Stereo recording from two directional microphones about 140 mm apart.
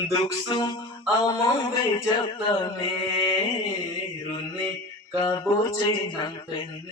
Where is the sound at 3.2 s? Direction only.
35° left (ahead or behind).